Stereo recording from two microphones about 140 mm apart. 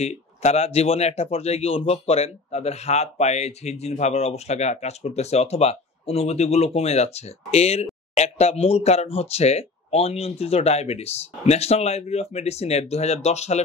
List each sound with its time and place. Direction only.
0.0 s speech: 50° left (ahead or behind)